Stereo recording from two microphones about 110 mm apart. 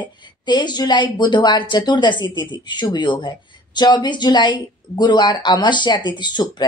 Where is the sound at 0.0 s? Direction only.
40° left (ahead or behind).